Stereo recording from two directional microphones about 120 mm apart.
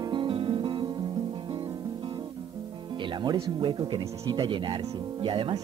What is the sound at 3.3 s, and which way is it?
Speech, 45° right (ahead or behind).